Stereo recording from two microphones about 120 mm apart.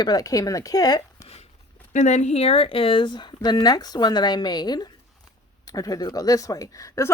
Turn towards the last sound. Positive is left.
turn(degrees=25)  # may be behind; listen again after turning